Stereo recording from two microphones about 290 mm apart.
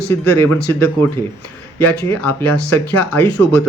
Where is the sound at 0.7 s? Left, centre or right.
Centre.